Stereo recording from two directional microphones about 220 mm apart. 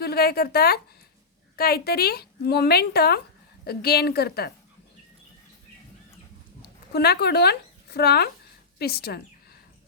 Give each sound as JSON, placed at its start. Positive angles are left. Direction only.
{"t": 0.0, "sound": "a woman's voice", "side_deg": 45}
{"t": 6.6, "sound": "a woman's voice", "side_deg": 45}